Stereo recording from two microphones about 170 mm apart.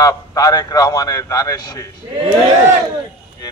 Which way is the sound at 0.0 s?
20° left (ahead or behind).